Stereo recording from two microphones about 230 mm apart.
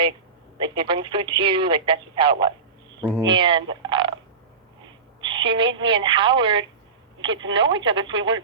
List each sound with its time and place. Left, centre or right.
0.6 s speech: right
5.2 s speech: right
7.3 s speech: right
7.9 s speech: centre